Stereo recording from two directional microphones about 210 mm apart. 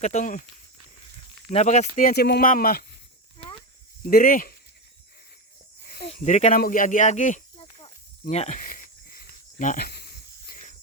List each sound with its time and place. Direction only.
0.0 s speech: 35° left (ahead or behind)
1.5 s speech: 35° left (ahead or behind)
4.1 s speech: 40° left (ahead or behind)
6.1 s a sound: 35° left (ahead or behind)